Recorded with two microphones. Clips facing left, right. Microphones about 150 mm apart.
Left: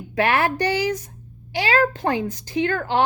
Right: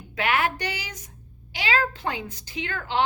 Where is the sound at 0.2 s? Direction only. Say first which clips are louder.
Left 5 dB; 40° left (ahead or behind).